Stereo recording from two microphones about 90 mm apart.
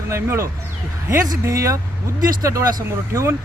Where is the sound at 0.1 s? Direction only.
30° right (ahead or behind).